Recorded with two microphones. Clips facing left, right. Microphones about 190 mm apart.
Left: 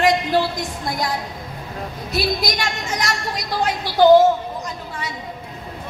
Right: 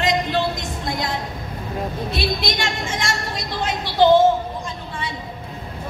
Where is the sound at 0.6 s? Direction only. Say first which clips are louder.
Left 1 dB; 25° right (ahead or behind).